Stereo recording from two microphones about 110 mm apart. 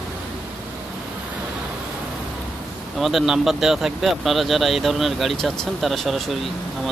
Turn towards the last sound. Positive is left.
turn(degrees=0)  # may be behind; listen again after turning